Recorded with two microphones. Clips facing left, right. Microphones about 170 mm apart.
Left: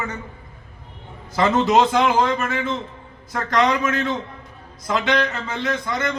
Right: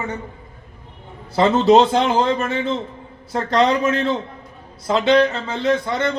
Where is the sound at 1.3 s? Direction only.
30° right (ahead or behind).